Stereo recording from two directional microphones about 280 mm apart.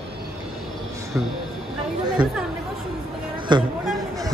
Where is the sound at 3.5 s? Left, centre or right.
Centre.